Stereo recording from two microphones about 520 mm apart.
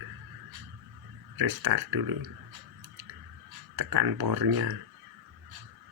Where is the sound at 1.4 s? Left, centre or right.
Right.